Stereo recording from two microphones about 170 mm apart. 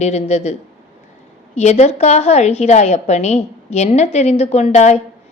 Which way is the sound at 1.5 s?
40° left (ahead or behind).